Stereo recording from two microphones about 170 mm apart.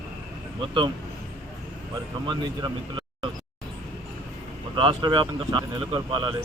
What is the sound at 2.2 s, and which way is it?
Speech, 25° right (ahead or behind).